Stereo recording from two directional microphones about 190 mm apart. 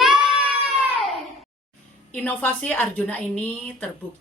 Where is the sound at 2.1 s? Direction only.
10° left (ahead or behind).